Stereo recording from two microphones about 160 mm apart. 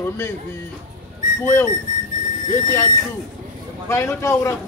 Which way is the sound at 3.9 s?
15° left (ahead or behind).